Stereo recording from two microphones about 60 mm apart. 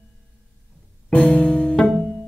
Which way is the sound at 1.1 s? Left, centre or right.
Left.